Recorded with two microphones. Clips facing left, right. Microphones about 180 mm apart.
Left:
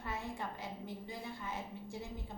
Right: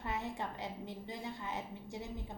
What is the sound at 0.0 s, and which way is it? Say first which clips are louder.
A woman's voice: right 2 dB; 20° right (ahead or behind).